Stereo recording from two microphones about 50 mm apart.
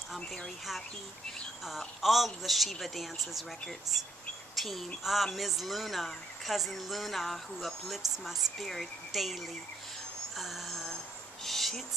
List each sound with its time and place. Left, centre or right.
1.6 s speech: centre
4.6 s speech: centre
10.3 s a sound: centre
11.4 s owl: centre